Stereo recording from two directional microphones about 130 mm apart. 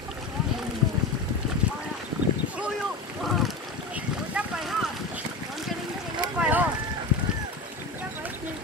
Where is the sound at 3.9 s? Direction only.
5° right (ahead or behind).